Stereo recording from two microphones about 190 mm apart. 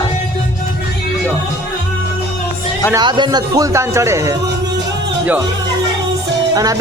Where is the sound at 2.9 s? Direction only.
25° right (ahead or behind).